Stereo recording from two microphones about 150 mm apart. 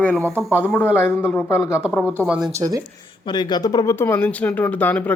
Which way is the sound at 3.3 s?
30° left (ahead or behind).